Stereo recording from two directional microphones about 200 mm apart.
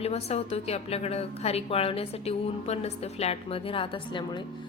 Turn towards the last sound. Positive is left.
turn(degrees=25)  # may be behind; listen again after turning